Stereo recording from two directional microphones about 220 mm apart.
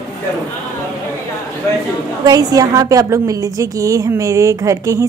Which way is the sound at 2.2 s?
15° right (ahead or behind).